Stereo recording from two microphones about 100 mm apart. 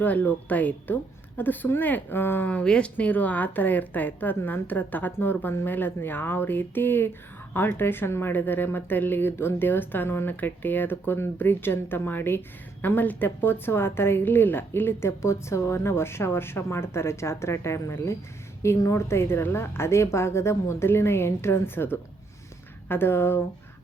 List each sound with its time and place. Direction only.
0.0 s speech: 15° left (ahead or behind)